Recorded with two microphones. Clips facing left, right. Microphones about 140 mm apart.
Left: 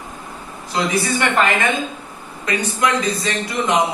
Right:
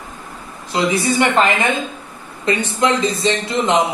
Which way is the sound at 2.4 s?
25° right (ahead or behind).